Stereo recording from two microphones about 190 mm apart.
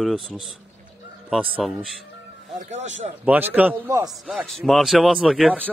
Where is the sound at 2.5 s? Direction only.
40° right (ahead or behind).